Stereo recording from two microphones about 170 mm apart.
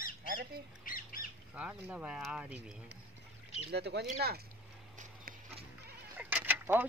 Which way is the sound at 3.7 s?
75° right (ahead or behind).